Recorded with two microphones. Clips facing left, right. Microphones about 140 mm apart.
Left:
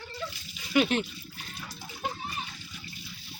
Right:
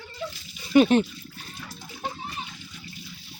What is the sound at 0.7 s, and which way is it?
Speech, 40° right (ahead or behind).